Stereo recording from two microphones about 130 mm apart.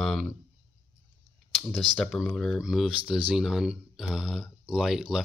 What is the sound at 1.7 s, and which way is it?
Speech, centre (ahead or behind).